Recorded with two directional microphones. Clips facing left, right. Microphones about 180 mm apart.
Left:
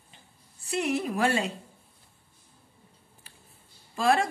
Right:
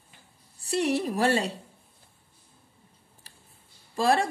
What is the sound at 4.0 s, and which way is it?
Speech, 35° right (ahead or behind).